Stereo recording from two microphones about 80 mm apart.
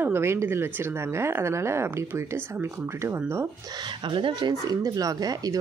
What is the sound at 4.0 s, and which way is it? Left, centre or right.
Speech, right.